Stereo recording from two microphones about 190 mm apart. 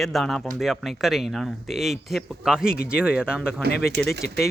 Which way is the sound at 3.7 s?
60° left (ahead or behind).